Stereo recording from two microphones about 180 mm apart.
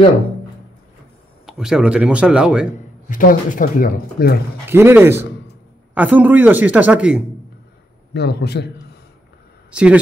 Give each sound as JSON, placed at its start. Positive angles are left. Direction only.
{"t": 1.4, "sound": "speech", "side_deg": -5}
{"t": 3.1, "sound": "speech", "side_deg": 50}
{"t": 4.6, "sound": "speech", "side_deg": -10}
{"t": 8.1, "sound": "a man's voice", "side_deg": 65}
{"t": 9.7, "sound": "speech", "side_deg": -5}